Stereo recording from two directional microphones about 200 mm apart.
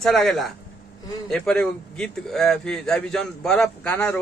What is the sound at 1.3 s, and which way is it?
Speech, 5° left (ahead or behind).